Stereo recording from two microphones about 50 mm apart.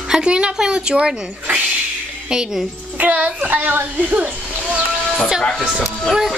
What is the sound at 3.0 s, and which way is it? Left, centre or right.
A child's voice, right.